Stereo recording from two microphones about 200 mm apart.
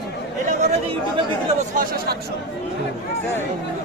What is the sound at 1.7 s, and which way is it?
Speech, 45° right (ahead or behind).